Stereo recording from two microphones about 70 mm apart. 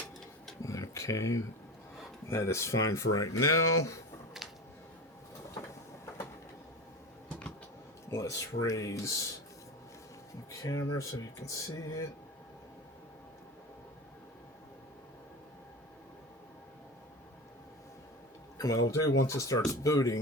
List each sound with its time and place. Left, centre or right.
0.6 s speech: left
4.4 s a sound: centre
8.1 s speech: left
10.5 s speech: left
18.5 s speech: left